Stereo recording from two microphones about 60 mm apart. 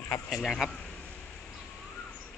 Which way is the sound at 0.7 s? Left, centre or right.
Left.